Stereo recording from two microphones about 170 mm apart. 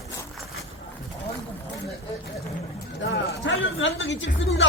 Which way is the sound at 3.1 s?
90° left.